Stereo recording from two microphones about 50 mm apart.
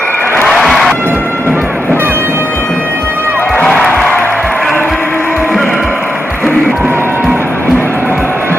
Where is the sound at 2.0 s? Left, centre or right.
Right.